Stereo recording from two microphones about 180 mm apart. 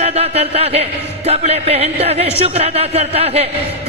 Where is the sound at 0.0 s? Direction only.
35° right (ahead or behind).